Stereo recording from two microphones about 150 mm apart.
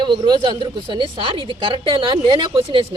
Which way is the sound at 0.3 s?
30° right (ahead or behind).